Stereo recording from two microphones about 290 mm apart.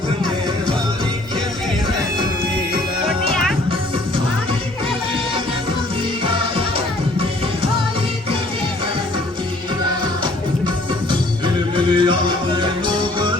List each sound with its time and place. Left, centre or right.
11.4 s music: centre